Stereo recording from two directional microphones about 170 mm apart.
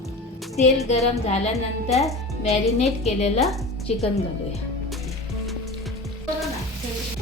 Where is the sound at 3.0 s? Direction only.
40° left (ahead or behind).